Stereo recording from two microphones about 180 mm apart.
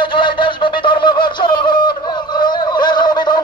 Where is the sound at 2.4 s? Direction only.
25° left (ahead or behind).